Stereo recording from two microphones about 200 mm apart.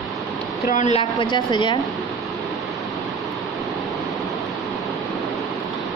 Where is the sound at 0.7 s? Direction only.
40° left (ahead or behind).